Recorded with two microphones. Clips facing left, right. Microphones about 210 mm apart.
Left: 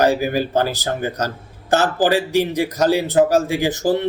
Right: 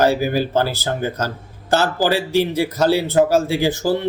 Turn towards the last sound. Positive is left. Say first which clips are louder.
# even
turn(degrees=15)  # may be behind; listen again after turning